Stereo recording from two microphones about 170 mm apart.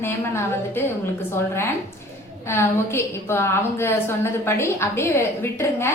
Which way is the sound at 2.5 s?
15° left (ahead or behind).